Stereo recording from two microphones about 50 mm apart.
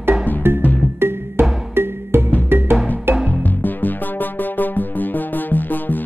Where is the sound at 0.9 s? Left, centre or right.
Right.